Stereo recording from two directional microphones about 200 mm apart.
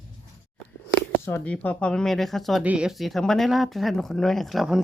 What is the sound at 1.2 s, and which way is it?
Speech, 10° left (ahead or behind).